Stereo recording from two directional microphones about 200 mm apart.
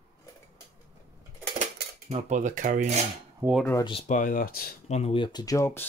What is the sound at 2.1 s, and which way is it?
Cutlery, 40° right (ahead or behind).